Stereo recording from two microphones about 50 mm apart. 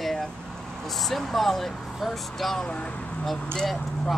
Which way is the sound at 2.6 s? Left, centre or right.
Centre.